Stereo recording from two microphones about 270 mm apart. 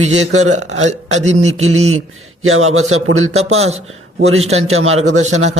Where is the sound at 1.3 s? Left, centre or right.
Right.